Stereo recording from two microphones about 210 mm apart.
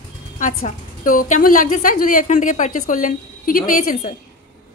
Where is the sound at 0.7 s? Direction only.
40° left (ahead or behind).